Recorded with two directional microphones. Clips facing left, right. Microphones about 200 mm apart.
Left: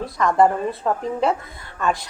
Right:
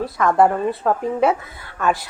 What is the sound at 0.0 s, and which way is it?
Speech, 5° right (ahead or behind).